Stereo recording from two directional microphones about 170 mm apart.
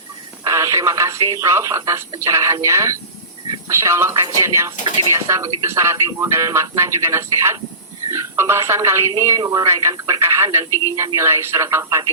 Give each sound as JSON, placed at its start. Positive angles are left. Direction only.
{"t": 0.4, "sound": "speech", "side_deg": -20}